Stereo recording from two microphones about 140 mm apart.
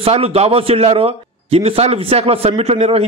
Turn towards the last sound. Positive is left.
turn(degrees=-50)  # may be behind; listen again after turning